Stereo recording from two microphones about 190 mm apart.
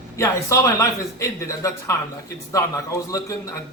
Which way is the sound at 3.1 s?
15° left (ahead or behind).